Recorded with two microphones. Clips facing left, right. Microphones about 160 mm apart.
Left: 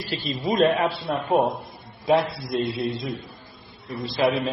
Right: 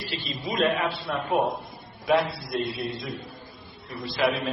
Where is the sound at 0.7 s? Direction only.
35° left (ahead or behind).